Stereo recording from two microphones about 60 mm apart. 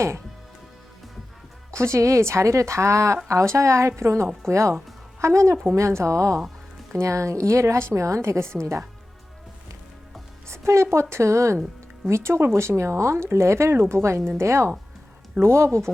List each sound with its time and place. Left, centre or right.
1.7 s speech: right
10.5 s speech: right